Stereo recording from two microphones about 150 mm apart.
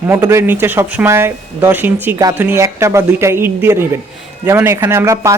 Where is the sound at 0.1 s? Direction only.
20° right (ahead or behind).